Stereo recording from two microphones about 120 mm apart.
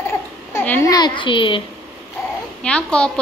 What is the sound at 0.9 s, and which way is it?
Speech, 40° left (ahead or behind).